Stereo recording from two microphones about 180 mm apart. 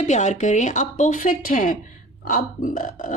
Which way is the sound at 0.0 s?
40° left (ahead or behind).